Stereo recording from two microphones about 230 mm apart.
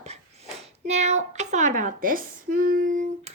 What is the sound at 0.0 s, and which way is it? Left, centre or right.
A child's voice, right.